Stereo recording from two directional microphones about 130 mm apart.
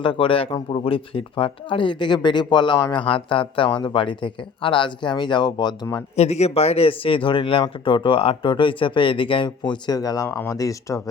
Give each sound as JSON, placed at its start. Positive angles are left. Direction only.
{"t": 0.0, "sound": "speech", "side_deg": 40}
{"t": 6.1, "sound": "speech", "side_deg": 55}
{"t": 10.2, "sound": "speech", "side_deg": 15}